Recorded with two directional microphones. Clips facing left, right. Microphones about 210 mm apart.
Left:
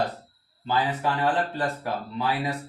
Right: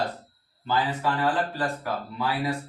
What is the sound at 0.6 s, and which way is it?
Speech, 25° left (ahead or behind).